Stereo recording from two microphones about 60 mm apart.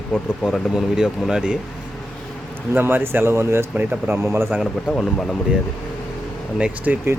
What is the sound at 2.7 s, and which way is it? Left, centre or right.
Speech, right.